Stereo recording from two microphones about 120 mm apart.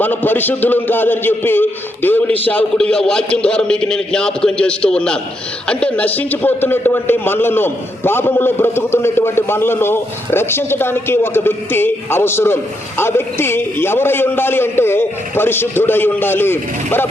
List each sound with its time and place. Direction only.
0.0 s a man's voice: 15° left (ahead or behind)